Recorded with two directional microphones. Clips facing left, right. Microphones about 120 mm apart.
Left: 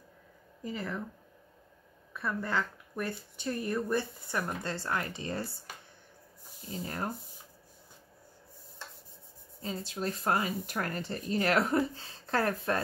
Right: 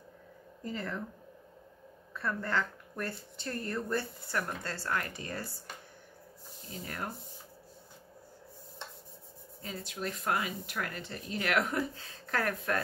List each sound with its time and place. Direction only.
0.7 s speech: 5° left (ahead or behind)
2.1 s speech: 10° left (ahead or behind)
6.8 s speech: 30° left (ahead or behind)
9.6 s speech: 30° left (ahead or behind)